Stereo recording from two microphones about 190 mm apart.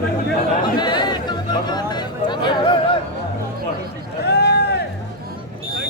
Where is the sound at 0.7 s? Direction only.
25° left (ahead or behind).